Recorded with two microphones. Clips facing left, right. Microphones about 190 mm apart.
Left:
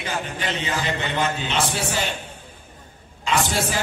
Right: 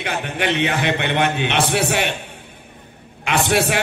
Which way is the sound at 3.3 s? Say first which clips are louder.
Right 2 dB; 65° right (ahead or behind).